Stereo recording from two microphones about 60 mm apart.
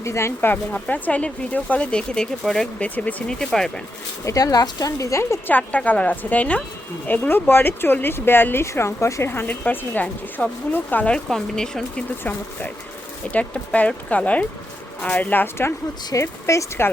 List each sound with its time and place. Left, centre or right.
0.0 s a woman's voice: left
0.7 s speech: left; by 2.6 s centre
2.7 s speech: left
3.2 s speech: centre
4.3 s speech: left
5.5 s speech: left
7.1 s speech: left
8.6 s a woman's voice: left
9.3 s speech: left
11.3 s speech: centre
13.3 s speech: centre
16.2 s a woman's voice: left